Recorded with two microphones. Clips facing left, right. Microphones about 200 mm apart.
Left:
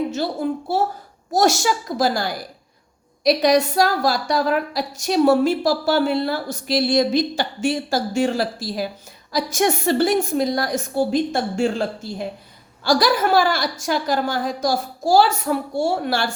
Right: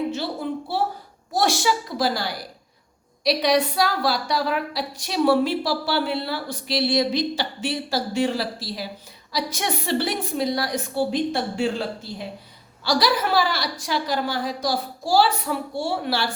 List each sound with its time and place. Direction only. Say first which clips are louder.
0.7 s a woman's voice: left 4 dB; 45° left (ahead or behind)